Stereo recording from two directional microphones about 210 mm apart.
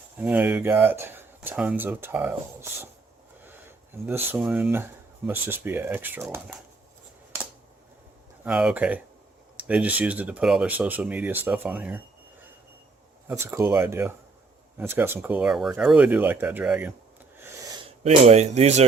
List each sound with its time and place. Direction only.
0.2 s speech: 5° right (ahead or behind)
4.3 s speech: 5° right (ahead or behind)
8.4 s speech: 5° right (ahead or behind)
13.2 s speech: 15° right (ahead or behind)
17.4 s a sound: 20° right (ahead or behind)
18.0 s speech: 30° right (ahead or behind)